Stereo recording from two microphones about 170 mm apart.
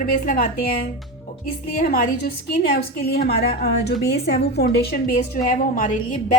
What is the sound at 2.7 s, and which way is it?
A woman's voice, 70° left (ahead or behind).